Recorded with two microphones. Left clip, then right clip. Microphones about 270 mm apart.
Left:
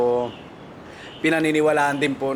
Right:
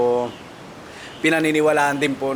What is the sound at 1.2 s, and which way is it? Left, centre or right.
Speech, centre.